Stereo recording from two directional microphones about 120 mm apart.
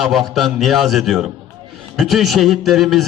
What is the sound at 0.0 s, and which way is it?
A man's voice, centre (ahead or behind).